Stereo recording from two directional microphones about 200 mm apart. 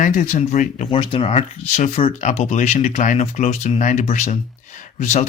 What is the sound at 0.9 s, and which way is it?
Speech, 25° left (ahead or behind).